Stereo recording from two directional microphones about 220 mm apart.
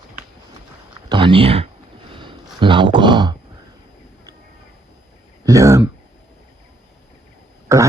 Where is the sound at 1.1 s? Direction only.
25° right (ahead or behind).